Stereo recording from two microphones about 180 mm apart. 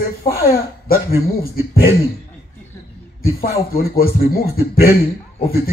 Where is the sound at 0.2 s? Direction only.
55° left (ahead or behind).